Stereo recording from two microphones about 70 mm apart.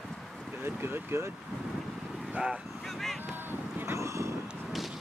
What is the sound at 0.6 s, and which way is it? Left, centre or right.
Speech, right.